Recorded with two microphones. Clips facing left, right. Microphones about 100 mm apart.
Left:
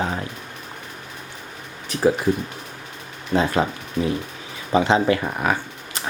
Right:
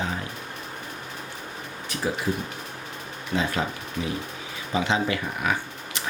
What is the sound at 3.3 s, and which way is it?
Speech, 40° left (ahead or behind).